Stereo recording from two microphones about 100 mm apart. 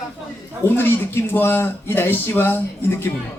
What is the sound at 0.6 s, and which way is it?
Speech, 20° left (ahead or behind).